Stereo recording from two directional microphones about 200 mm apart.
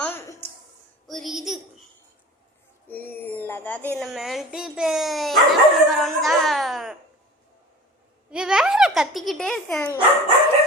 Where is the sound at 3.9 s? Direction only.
Centre (ahead or behind).